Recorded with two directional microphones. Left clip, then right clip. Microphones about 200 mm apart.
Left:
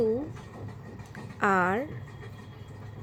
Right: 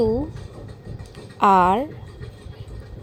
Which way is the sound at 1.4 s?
20° right (ahead or behind).